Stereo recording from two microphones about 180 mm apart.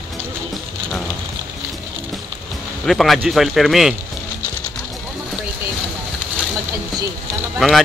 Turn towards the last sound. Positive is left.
turn(degrees=0)  # may be behind; listen again after turning